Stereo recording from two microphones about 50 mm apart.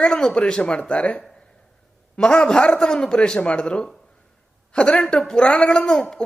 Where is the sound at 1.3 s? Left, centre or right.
Centre.